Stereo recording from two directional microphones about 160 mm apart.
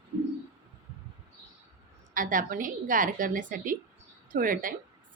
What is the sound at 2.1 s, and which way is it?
A woman's voice, 60° right (ahead or behind).